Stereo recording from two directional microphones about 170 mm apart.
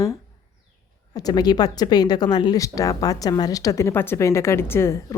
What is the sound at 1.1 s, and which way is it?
Speech, 25° left (ahead or behind).